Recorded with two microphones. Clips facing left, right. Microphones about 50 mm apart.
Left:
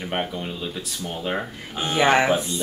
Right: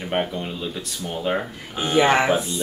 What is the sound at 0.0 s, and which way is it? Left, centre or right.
Speech, centre.